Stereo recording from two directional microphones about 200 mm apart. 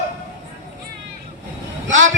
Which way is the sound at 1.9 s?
70° right (ahead or behind).